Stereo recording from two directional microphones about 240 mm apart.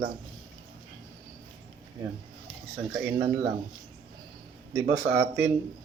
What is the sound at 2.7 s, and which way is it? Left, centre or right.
Speech, centre.